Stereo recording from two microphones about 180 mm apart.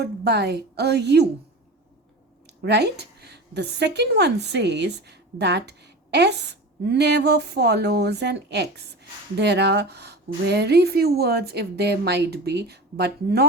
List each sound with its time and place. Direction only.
0.0 s a woman's voice: 65° right (ahead or behind)
2.6 s a woman's voice: 65° right (ahead or behind)